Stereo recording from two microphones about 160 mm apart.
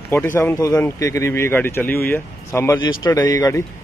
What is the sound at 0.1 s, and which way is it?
Speech, 15° left (ahead or behind).